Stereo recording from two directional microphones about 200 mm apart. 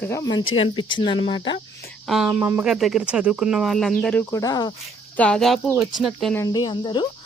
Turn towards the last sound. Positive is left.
turn(degrees=25)  # may be behind; listen again after turning